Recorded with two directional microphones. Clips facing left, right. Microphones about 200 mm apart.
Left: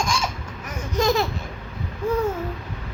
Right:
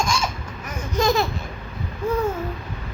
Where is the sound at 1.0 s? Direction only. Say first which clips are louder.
Right 1 dB; 20° left (ahead or behind).